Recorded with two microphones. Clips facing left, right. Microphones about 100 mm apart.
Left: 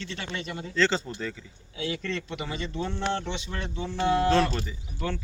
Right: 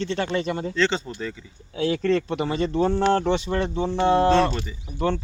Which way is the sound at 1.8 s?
40° right (ahead or behind).